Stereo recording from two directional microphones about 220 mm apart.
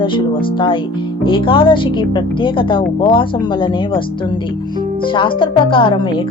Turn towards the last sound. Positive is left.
turn(degrees=25)  # may be behind; listen again after turning